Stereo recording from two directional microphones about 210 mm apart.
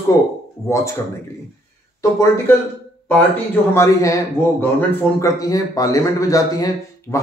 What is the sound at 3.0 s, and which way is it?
Speech, 10° left (ahead or behind).